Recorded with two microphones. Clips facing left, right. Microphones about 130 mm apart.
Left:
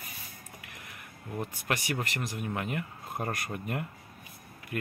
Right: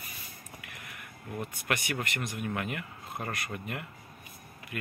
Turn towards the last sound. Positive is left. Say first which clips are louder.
# left 3 dB
turn(degrees=40)  # may be behind; listen again after turning